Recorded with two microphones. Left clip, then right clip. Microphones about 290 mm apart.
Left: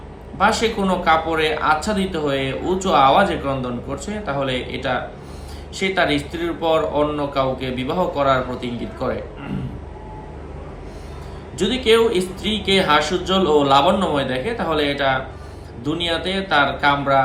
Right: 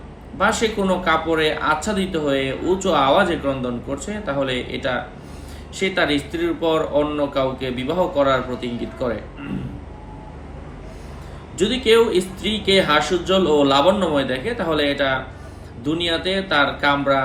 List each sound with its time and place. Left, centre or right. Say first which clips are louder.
0.3 s speech: left 1 dB; centre
11.5 s speech: right 1 dB; centre